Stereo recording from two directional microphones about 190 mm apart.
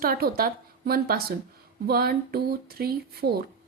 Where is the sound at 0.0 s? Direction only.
50° right (ahead or behind).